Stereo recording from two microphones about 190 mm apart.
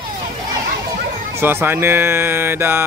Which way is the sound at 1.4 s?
10° right (ahead or behind).